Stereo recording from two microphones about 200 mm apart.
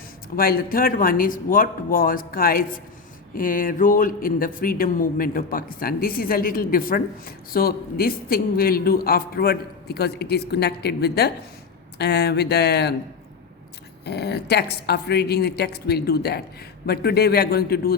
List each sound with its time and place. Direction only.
0.3 s speech: 50° left (ahead or behind)
14.0 s speech: 55° left (ahead or behind)